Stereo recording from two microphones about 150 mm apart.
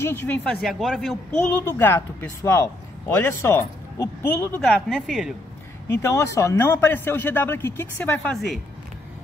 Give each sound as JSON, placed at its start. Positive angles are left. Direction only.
{"t": 0.0, "sound": "speech", "side_deg": 15}
{"t": 1.3, "sound": "speech", "side_deg": 15}
{"t": 4.6, "sound": "speech", "side_deg": 0}
{"t": 5.9, "sound": "speech", "side_deg": 20}